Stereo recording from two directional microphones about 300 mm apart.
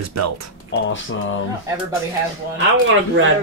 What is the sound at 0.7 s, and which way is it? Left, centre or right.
Speech, left.